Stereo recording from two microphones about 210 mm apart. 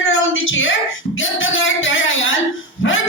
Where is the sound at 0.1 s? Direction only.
65° left (ahead or behind).